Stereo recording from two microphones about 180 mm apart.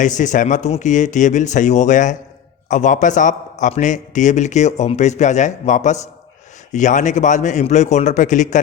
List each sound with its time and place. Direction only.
0.2 s a man's voice: 45° left (ahead or behind)